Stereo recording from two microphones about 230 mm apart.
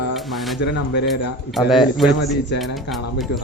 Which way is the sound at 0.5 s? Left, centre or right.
Left.